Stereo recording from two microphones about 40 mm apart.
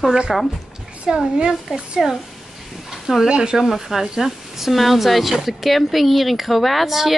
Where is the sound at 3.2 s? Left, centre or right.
Right.